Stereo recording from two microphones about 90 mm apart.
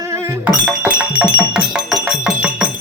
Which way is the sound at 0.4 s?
15° right (ahead or behind).